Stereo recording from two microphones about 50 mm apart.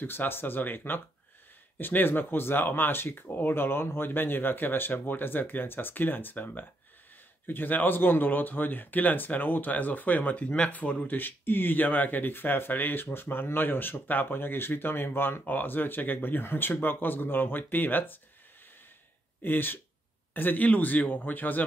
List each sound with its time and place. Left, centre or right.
0.0 s speech: left
11.1 s speech: left
19.4 s speech: left